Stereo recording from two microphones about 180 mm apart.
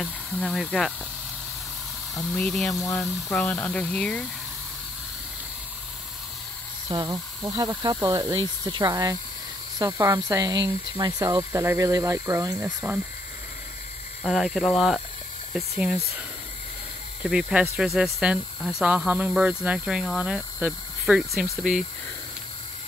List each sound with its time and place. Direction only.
0.0 s speech: centre (ahead or behind)
2.3 s speech: 5° left (ahead or behind)
6.9 s speech: 25° right (ahead or behind)
14.2 s speech: centre (ahead or behind)
17.2 s speech: 5° right (ahead or behind)